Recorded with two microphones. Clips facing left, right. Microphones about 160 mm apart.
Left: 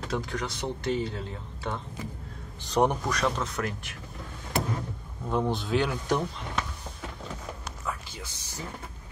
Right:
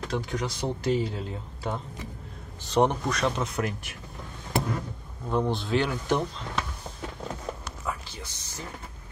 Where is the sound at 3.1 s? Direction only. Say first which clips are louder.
Right 1 dB; 5° right (ahead or behind).